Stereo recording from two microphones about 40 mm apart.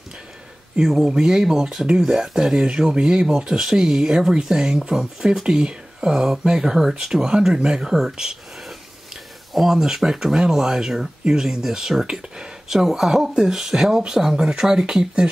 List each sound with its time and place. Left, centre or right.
0.7 s speech: centre
2.6 s speech: right
9.5 s speech: centre
14.3 s speech: right